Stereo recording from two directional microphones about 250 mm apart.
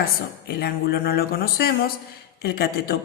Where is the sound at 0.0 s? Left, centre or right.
Left.